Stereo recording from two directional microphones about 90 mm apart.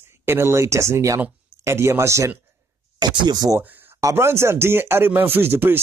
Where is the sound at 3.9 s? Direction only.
30° right (ahead or behind).